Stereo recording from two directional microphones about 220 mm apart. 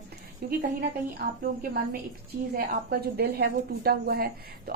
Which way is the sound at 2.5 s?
45° right (ahead or behind).